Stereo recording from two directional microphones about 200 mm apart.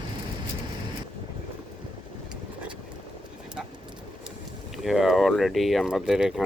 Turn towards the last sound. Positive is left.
turn(degrees=0)  # may be behind; listen again after turning